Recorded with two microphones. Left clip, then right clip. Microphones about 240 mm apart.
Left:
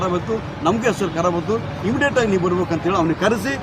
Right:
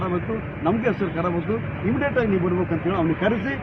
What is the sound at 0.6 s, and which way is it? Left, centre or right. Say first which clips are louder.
Speech: left 4 dB; left.